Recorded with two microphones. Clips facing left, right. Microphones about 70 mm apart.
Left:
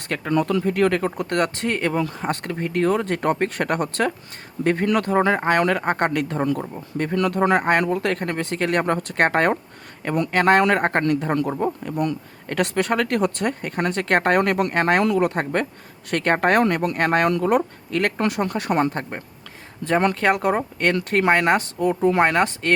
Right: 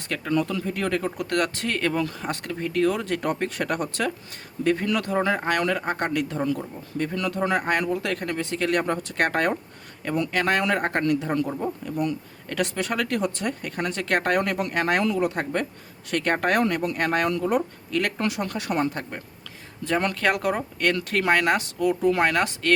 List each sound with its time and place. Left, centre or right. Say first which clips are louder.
0.1 s speech: left 4 dB; left
2.1 s speech: left 4 dB; left
8.1 s speech: left 3 dB; left
11.6 s speech: left 4 dB; left
15.1 s speech: left 4 dB; left
16.0 s speech: left 4 dB; left